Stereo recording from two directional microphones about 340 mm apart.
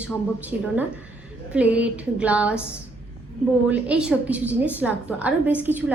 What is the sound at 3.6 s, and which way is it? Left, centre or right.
A woman's voice, centre.